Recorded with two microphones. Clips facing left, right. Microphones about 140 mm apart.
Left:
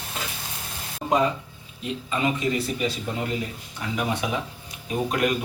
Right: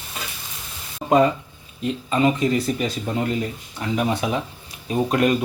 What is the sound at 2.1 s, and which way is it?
Speech, 40° right (ahead or behind).